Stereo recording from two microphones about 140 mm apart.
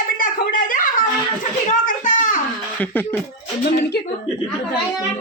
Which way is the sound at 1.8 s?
65° left (ahead or behind).